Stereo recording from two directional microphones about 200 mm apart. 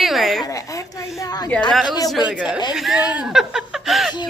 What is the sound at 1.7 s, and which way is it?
A woman's voice, centre (ahead or behind).